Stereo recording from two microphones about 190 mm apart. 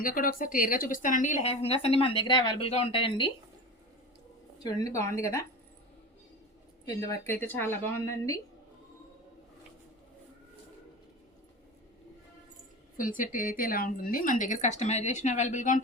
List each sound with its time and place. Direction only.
0.0 s a woman's voice: 45° left (ahead or behind); by 3.3 s 25° left (ahead or behind)
4.6 s a woman's voice: 15° left (ahead or behind)
6.8 s a woman's voice: 15° left (ahead or behind)
13.0 s speech: 45° left (ahead or behind)